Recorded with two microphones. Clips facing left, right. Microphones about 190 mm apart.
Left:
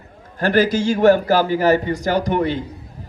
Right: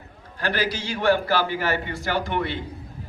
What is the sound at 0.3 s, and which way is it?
A man's voice, 45° left (ahead or behind).